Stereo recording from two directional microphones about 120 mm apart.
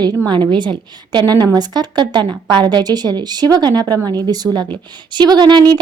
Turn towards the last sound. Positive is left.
turn(degrees=-40)  # may be behind; listen again after turning